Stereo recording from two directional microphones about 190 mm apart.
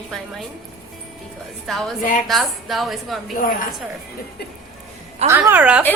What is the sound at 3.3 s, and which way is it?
Speech, 45° left (ahead or behind).